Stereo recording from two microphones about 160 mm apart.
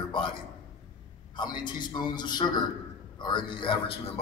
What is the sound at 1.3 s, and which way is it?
A man's voice, 30° left (ahead or behind).